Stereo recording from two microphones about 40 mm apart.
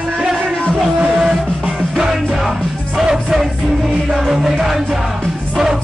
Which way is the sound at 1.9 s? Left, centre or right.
Centre.